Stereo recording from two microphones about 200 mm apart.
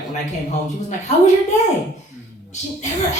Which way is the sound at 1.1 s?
35° left (ahead or behind).